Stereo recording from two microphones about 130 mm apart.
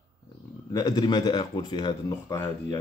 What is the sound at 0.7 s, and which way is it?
Speech, 30° left (ahead or behind).